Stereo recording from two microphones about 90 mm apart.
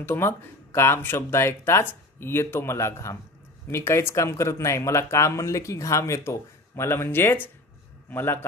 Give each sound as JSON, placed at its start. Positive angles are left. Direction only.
{"t": 0.0, "sound": "speech", "side_deg": 25}